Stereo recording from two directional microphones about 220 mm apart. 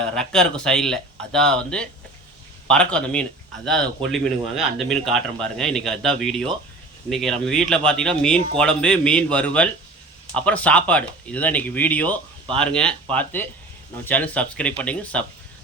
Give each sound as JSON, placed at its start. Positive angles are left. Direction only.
{"t": 0.1, "sound": "speech", "side_deg": 5}